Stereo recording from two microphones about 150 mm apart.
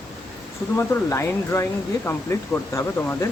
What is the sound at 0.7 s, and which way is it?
Speech, 20° left (ahead or behind).